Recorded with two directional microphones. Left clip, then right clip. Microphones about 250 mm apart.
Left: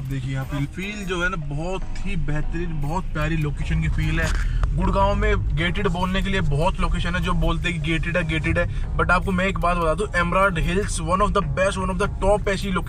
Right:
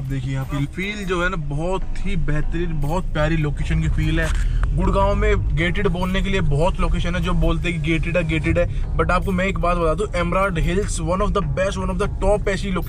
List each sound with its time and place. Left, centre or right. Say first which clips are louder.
0.1 s a man's voice: right 2 dB; centre